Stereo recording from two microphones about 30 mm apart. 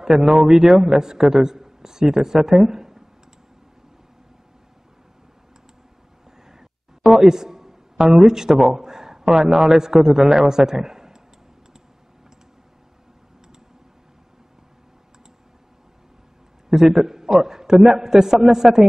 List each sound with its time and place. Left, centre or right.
0.0 s a man's voice: centre
7.2 s a man's voice: centre
10.5 s a sound: centre
16.6 s a man's voice: centre